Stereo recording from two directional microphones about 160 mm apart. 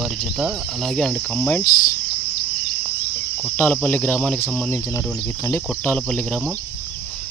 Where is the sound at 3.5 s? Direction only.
10° left (ahead or behind).